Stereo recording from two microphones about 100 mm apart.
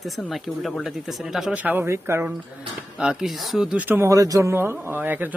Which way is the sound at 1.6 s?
20° right (ahead or behind).